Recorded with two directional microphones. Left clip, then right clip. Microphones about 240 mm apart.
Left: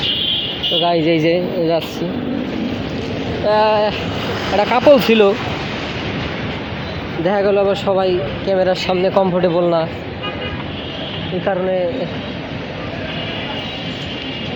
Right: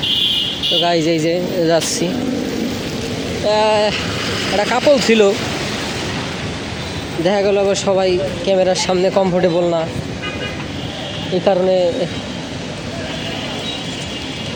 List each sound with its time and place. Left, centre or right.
0.8 s a man's voice: centre
3.4 s a man's voice: centre
7.3 s a man's voice: centre
11.5 s speech: right